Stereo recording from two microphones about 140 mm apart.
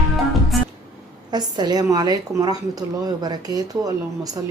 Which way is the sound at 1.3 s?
30° right (ahead or behind).